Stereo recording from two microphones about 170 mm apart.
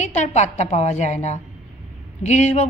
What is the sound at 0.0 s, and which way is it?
A woman's voice, 40° left (ahead or behind).